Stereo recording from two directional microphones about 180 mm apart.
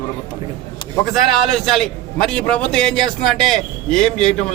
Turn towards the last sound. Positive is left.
turn(degrees=5)  # may be behind; listen again after turning